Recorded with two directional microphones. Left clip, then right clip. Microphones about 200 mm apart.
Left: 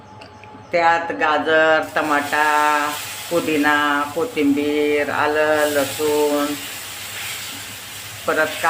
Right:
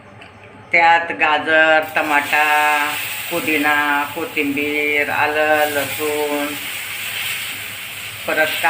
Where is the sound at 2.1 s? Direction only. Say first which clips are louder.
Right 2 dB; 25° left (ahead or behind).